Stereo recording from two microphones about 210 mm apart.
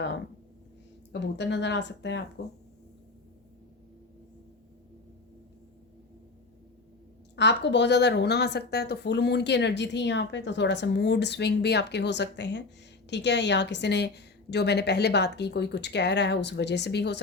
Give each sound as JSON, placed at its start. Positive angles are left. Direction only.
{"t": 1.4, "sound": "a woman's voice", "side_deg": 55}
{"t": 7.3, "sound": "a woman's voice", "side_deg": 55}